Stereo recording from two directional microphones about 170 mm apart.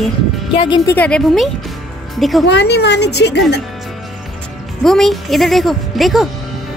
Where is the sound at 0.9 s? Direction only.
5° left (ahead or behind).